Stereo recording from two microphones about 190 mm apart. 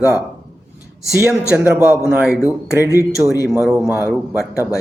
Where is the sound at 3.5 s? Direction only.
Centre (ahead or behind).